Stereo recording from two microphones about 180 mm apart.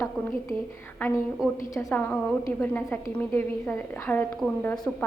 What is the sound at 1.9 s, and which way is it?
A woman's voice, 10° left (ahead or behind).